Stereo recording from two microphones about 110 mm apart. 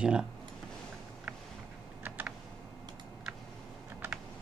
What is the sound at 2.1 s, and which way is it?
Computer keyboard, 15° right (ahead or behind).